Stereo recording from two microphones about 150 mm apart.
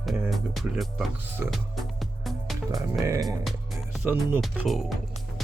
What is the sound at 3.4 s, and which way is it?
Music, centre (ahead or behind).